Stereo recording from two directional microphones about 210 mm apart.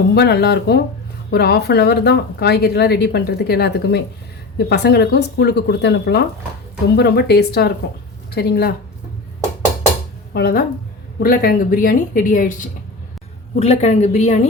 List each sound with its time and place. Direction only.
0.1 s speech: 50° left (ahead or behind)
10.3 s a woman's voice: 45° left (ahead or behind)